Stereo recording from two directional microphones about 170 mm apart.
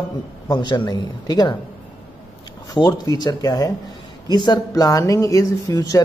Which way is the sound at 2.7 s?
25° left (ahead or behind).